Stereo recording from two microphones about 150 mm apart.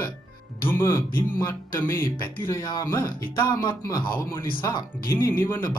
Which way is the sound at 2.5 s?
25° left (ahead or behind).